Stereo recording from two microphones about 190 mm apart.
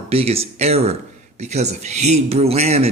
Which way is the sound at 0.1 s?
30° right (ahead or behind).